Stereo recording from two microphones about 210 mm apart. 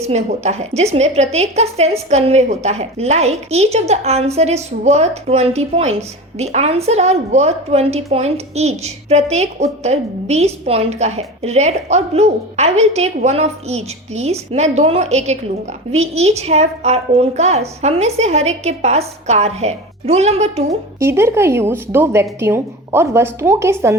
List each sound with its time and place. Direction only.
0.0 s a woman's voice: 30° right (ahead or behind)
21.0 s a woman's voice: 10° right (ahead or behind)